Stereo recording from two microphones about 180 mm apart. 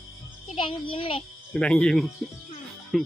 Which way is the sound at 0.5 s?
30° left (ahead or behind).